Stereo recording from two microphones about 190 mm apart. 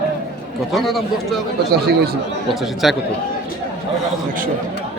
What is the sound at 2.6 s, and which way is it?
Speech, centre (ahead or behind).